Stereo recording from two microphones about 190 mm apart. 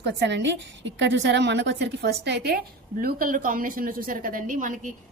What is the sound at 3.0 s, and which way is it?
A woman's voice, 50° right (ahead or behind).